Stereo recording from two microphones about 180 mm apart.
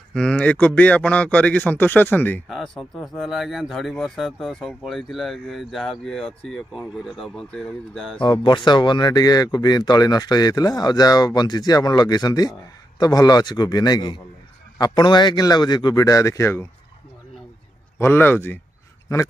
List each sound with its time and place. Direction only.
0.1 s a man's voice: 5° left (ahead or behind)
8.2 s speech: 25° left (ahead or behind)
17.9 s a man's voice: 10° left (ahead or behind)